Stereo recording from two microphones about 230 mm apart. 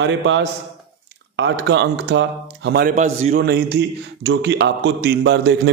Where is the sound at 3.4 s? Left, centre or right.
Right.